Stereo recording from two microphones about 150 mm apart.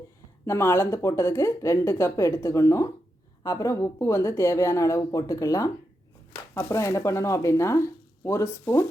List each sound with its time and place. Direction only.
0.4 s speech: 15° left (ahead or behind)